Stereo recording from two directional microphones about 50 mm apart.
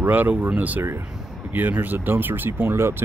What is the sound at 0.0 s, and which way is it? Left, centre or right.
Speech, right.